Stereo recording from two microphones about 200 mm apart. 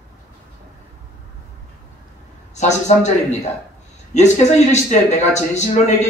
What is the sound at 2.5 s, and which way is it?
A man's voice, 35° left (ahead or behind).